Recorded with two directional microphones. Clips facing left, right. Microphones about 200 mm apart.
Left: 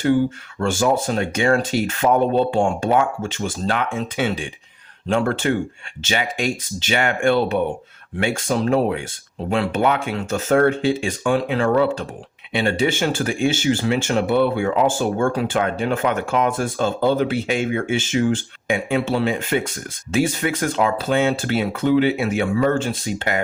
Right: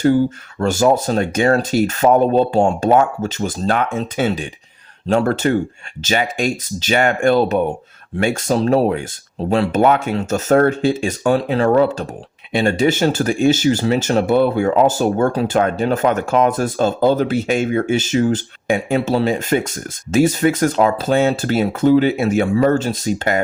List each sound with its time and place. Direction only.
0.6 s speech: 40° right (ahead or behind)